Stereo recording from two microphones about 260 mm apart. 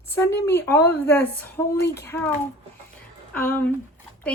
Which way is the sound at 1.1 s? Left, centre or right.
Centre.